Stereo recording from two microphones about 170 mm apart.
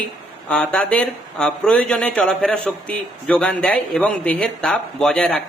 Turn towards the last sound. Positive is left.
turn(degrees=5)  # may be behind; listen again after turning